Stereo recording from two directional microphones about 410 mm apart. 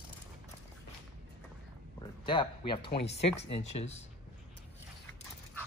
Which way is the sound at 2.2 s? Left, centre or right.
Centre.